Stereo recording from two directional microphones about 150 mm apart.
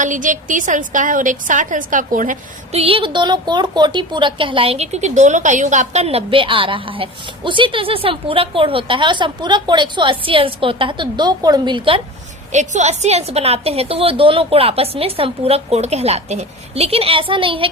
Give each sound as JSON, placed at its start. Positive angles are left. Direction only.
{"t": 0.0, "sound": "a woman's voice", "side_deg": -60}
{"t": 2.7, "sound": "a woman's voice", "side_deg": -40}
{"t": 12.5, "sound": "a woman's voice", "side_deg": -50}